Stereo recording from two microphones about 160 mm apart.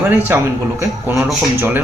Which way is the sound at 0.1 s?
10° right (ahead or behind).